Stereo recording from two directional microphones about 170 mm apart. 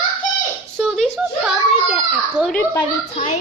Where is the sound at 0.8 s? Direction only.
Centre (ahead or behind).